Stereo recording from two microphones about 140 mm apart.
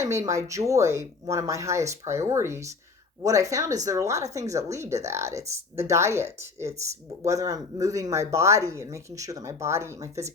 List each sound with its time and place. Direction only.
0.3 s speech: 25° right (ahead or behind)
7.3 s speech: 25° right (ahead or behind)